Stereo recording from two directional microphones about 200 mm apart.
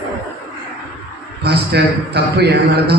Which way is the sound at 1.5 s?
55° right (ahead or behind).